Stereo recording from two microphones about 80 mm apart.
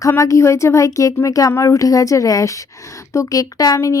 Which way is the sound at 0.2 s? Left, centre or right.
Left.